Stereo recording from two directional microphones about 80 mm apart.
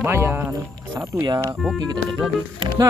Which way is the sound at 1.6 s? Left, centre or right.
Centre.